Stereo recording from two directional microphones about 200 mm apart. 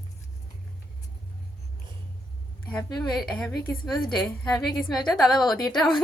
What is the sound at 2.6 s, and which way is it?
A woman's voice, 5° left (ahead or behind).